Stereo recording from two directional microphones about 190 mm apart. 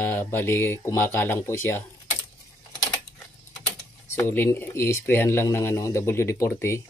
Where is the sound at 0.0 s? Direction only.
10° left (ahead or behind).